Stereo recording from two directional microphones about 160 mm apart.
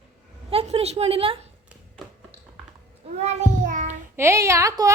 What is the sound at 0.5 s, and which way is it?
Speech, 40° right (ahead or behind).